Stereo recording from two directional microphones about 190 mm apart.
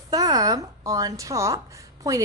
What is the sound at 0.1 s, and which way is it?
Speech, 20° right (ahead or behind).